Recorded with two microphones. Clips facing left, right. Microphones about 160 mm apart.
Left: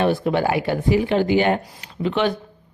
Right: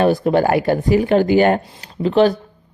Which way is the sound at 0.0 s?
40° right (ahead or behind).